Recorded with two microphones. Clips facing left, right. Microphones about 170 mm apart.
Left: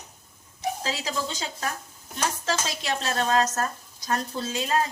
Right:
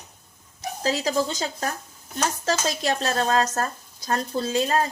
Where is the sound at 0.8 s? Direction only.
40° right (ahead or behind).